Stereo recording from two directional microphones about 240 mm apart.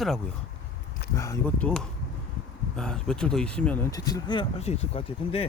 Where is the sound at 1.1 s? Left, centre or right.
Centre.